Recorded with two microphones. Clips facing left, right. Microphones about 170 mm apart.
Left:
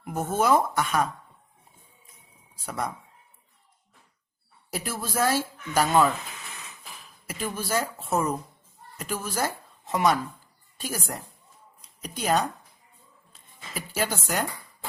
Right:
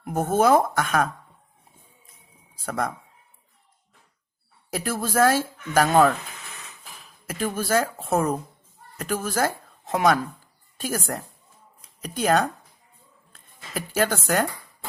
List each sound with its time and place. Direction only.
0.0 s speech: 50° right (ahead or behind)
2.6 s speech: 55° right (ahead or behind)
4.7 s speech: 55° right (ahead or behind)
7.3 s speech: 55° right (ahead or behind)
9.0 s a woman's voice: 50° right (ahead or behind)
13.3 s music: 50° right (ahead or behind)